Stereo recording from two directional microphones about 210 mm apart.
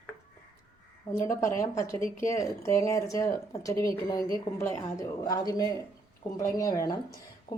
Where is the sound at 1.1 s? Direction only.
10° left (ahead or behind).